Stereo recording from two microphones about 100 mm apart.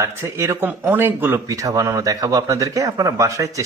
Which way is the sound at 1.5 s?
35° right (ahead or behind).